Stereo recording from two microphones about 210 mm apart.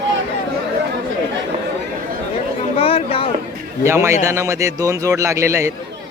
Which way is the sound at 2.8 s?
25° left (ahead or behind).